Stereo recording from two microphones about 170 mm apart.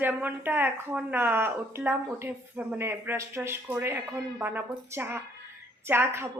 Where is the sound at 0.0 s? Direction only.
10° right (ahead or behind).